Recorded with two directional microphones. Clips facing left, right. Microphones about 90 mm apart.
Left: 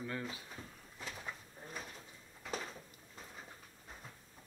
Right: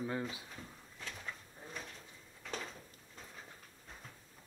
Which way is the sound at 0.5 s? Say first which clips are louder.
Even; 5° left (ahead or behind).